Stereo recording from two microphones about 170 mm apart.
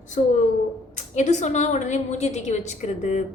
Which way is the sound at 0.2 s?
40° left (ahead or behind).